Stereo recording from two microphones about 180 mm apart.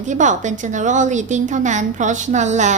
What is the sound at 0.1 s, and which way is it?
A woman's voice, 45° right (ahead or behind).